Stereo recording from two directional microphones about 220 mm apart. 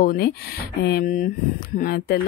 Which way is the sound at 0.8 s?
40° left (ahead or behind).